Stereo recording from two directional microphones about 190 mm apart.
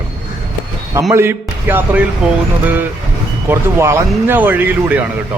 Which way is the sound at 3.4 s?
15° right (ahead or behind).